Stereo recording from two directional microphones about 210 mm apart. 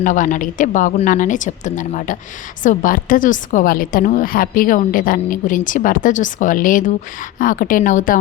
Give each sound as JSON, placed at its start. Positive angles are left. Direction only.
{"t": 0.0, "sound": "a woman's voice", "side_deg": 40}